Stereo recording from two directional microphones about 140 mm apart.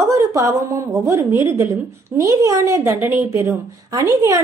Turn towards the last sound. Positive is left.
turn(degrees=-25)  # may be behind; listen again after turning